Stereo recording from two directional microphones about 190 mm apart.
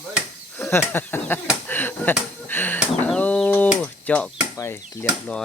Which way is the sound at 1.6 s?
10° left (ahead or behind).